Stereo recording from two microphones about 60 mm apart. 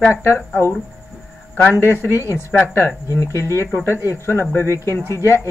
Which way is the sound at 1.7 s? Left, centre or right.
Left.